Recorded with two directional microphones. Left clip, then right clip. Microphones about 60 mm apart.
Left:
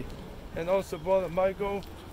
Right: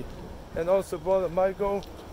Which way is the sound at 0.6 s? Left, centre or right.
Right.